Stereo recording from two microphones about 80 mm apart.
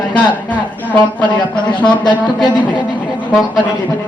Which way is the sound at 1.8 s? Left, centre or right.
Left.